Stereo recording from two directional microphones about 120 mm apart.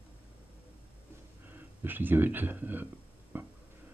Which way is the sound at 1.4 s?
15° right (ahead or behind).